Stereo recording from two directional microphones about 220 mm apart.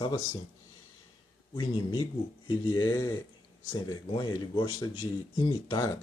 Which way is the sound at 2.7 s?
15° left (ahead or behind).